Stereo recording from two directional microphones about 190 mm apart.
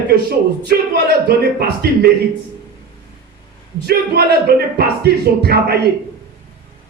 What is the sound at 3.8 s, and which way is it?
Speech, 55° right (ahead or behind).